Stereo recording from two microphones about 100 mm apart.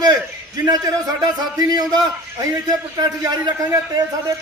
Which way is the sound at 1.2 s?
40° right (ahead or behind).